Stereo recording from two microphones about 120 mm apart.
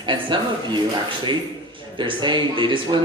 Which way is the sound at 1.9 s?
40° right (ahead or behind).